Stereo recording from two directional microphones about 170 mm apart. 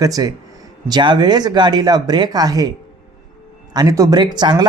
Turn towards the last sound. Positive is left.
turn(degrees=-25)  # may be behind; listen again after turning